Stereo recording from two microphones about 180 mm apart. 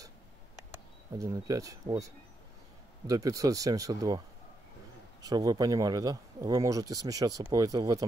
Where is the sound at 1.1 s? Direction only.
20° right (ahead or behind).